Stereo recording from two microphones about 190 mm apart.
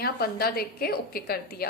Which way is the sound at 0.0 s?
55° left (ahead or behind).